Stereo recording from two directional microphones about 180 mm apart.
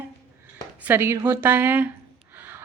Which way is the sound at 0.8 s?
10° right (ahead or behind).